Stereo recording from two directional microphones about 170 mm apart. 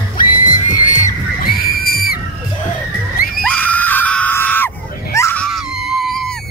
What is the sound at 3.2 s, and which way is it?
Screaming, 60° left (ahead or behind).